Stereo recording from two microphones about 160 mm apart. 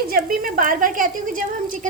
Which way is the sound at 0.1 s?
65° right (ahead or behind).